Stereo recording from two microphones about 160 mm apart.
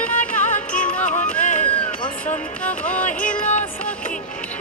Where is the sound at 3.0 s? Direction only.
50° left (ahead or behind).